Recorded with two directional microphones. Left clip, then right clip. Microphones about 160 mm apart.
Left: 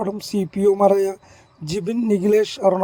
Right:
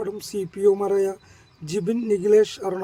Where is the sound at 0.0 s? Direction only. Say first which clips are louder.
Left 4 dB; 30° left (ahead or behind).